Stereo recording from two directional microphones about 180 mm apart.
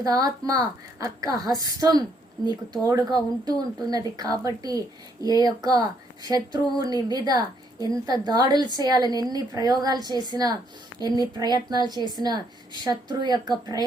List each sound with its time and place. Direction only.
0.0 s speech: 20° right (ahead or behind)